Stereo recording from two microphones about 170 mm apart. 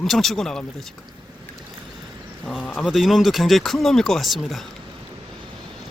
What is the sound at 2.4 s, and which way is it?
Speech, 5° left (ahead or behind).